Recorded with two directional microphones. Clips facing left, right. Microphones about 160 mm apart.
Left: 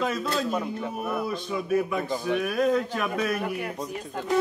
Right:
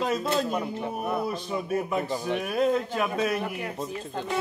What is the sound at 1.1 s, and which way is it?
A man's voice, 30° right (ahead or behind).